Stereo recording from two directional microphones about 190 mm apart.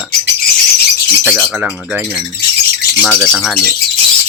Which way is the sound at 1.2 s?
Centre (ahead or behind).